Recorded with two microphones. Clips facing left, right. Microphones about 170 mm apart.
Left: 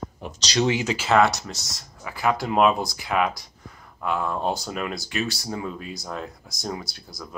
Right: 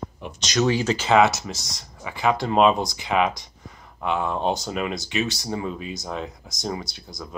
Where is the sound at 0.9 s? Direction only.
5° left (ahead or behind).